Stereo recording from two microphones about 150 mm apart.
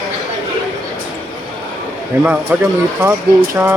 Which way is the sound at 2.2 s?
10° right (ahead or behind).